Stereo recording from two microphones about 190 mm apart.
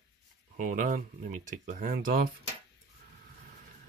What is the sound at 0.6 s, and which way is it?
Speech, 45° right (ahead or behind).